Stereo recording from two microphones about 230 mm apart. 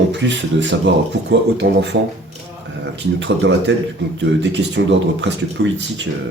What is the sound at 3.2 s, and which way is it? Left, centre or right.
Speech, right.